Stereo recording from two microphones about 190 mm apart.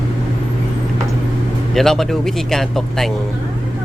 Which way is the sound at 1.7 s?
Centre (ahead or behind).